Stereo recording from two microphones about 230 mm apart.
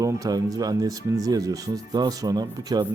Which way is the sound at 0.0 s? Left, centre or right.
Centre.